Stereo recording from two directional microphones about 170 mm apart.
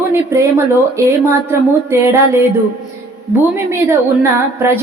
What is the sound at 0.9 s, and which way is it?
Music, 15° right (ahead or behind).